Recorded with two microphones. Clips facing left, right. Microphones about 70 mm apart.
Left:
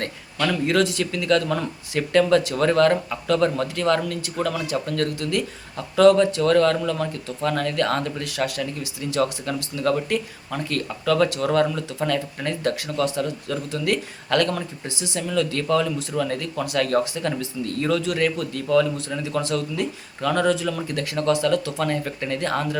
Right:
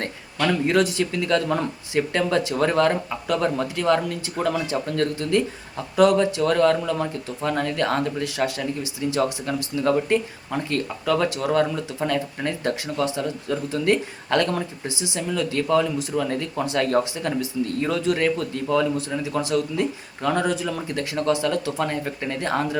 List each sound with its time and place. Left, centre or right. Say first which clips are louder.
0.0 s speech: right 1 dB; centre